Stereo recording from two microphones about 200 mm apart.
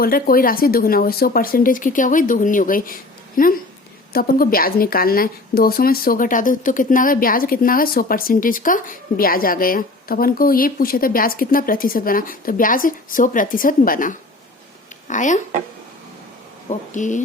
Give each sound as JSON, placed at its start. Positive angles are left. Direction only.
{"t": 0.0, "sound": "speech", "side_deg": 45}
{"t": 16.6, "sound": "speech", "side_deg": 40}